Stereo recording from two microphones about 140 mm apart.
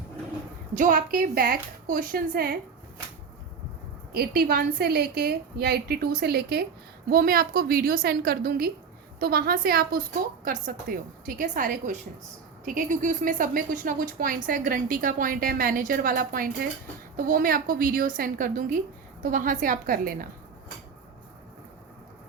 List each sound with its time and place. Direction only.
0.7 s a woman's voice: 65° right (ahead or behind); by 2.6 s 90° right
4.1 s a woman's voice: 90° right
7.1 s a woman's voice: 90° right
10.4 s a woman's voice: 75° right (ahead or behind)